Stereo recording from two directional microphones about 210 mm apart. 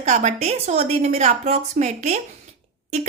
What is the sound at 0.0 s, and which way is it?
A woman's voice, 35° right (ahead or behind).